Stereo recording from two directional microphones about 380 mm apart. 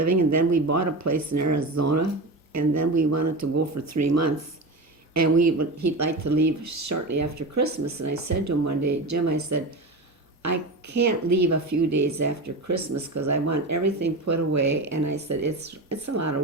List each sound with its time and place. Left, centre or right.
0.0 s speech: right